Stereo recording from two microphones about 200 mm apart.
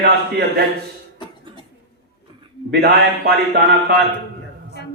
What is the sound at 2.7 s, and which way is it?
Speech, 50° right (ahead or behind).